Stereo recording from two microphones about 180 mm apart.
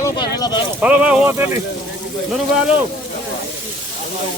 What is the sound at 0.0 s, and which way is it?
Speech, 20° left (ahead or behind).